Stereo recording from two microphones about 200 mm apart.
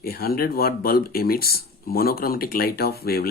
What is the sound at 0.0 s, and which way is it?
Speech, 50° left (ahead or behind).